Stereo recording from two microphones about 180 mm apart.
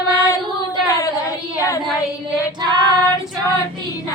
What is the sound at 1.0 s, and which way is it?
Child singing, 20° left (ahead or behind).